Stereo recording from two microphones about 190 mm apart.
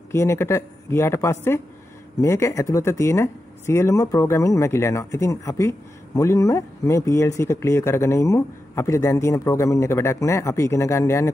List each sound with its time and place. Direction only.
0.1 s speech: 15° left (ahead or behind)